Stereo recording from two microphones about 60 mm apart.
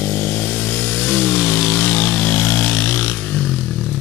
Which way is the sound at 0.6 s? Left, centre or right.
Left.